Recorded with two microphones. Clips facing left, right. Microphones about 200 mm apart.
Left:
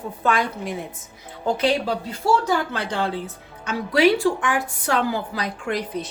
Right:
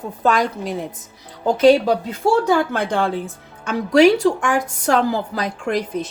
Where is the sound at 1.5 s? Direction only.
45° right (ahead or behind).